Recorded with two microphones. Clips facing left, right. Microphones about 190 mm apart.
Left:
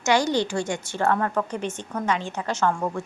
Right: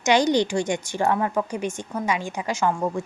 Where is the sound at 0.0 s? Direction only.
20° right (ahead or behind).